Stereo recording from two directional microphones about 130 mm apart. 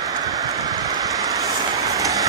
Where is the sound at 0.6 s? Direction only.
30° right (ahead or behind).